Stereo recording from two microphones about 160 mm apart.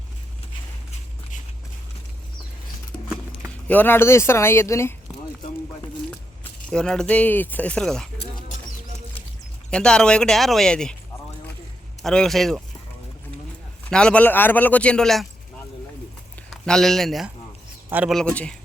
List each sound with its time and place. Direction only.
3.4 s speech: 10° left (ahead or behind)
6.7 s speech: 5° left (ahead or behind)
9.6 s speech: 5° left (ahead or behind)
12.0 s speech: 5° left (ahead or behind)
13.9 s speech: 5° left (ahead or behind)
16.5 s speech: 5° left (ahead or behind)
17.8 s a man's voice: 10° right (ahead or behind)
18.1 s speech: 5° left (ahead or behind)